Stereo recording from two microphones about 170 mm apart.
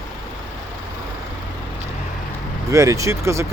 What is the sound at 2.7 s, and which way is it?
Speech, 20° right (ahead or behind).